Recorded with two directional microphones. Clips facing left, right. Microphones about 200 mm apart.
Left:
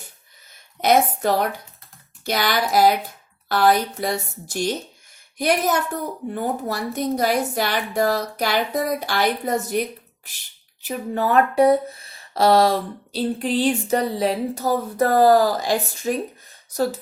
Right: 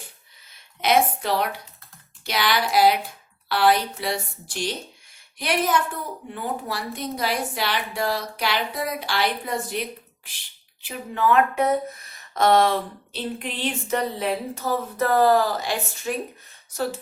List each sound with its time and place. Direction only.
0.5 s a woman's voice: 45° left (ahead or behind)
10.8 s speech: 40° left (ahead or behind)